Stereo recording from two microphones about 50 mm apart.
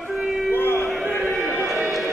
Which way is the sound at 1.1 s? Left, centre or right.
Centre.